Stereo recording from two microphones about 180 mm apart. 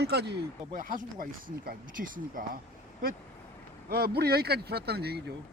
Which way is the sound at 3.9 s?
60° right (ahead or behind).